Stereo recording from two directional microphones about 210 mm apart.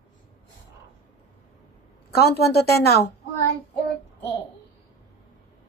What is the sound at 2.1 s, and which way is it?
Speech, 50° left (ahead or behind).